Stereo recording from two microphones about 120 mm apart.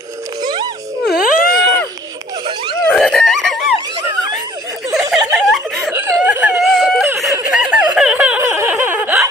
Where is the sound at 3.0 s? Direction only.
5° left (ahead or behind).